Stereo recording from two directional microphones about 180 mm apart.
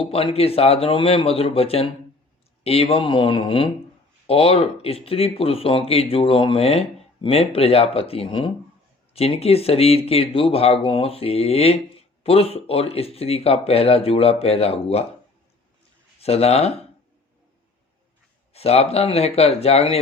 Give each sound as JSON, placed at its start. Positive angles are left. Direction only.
{"t": 0.0, "sound": "speech", "side_deg": 30}
{"t": 16.2, "sound": "speech", "side_deg": 35}
{"t": 18.5, "sound": "speech", "side_deg": 35}